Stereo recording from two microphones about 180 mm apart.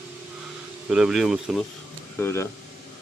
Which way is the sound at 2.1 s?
15° left (ahead or behind).